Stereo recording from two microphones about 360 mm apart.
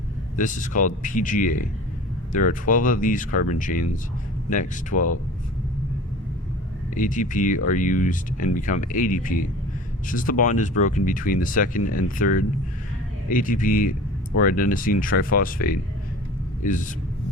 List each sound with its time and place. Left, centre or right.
0.3 s speech: left
6.9 s speech: left